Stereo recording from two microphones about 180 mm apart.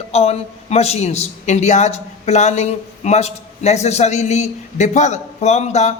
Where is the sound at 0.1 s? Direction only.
35° left (ahead or behind).